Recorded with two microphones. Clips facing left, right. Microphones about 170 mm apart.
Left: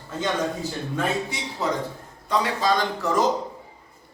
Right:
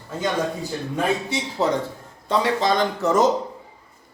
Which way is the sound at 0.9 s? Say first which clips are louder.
Right 4 dB; 25° right (ahead or behind).